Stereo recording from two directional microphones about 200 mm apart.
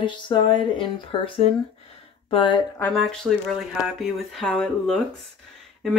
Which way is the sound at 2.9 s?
5° left (ahead or behind).